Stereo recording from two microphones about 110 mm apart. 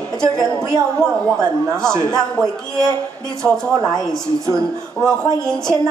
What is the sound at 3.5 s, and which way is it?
Speech, 5° left (ahead or behind).